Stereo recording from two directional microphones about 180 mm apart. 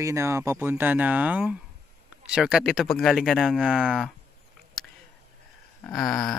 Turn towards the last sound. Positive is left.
turn(degrees=5)  # may be behind; listen again after turning